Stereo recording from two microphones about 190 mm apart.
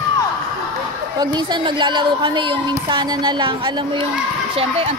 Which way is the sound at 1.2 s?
25° right (ahead or behind).